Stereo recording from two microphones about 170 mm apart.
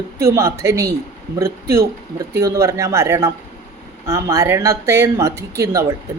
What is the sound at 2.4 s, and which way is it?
Speech, 20° right (ahead or behind).